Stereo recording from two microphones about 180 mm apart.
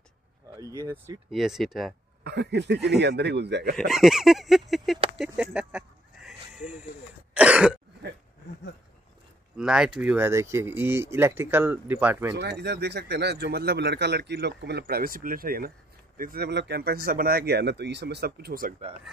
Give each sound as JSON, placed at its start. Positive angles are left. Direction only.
{"t": 0.6, "sound": "speech", "side_deg": -20}
{"t": 1.3, "sound": "chicken", "side_deg": 0}
{"t": 2.2, "sound": "speech", "side_deg": -70}
{"t": 3.7, "sound": "chicken", "side_deg": 0}
{"t": 5.2, "sound": "a sound", "side_deg": -5}
{"t": 7.3, "sound": "throat clearing", "side_deg": -5}
{"t": 9.6, "sound": "speech", "side_deg": -5}
{"t": 12.4, "sound": "speech", "side_deg": -70}